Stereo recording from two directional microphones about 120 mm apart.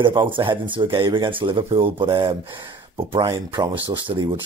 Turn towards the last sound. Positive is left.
turn(degrees=-45)  # may be behind; listen again after turning